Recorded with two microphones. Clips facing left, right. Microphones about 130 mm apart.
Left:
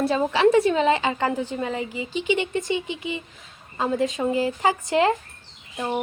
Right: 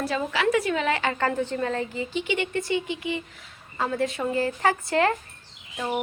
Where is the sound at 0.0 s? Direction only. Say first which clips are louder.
Left 6 dB; 25° left (ahead or behind).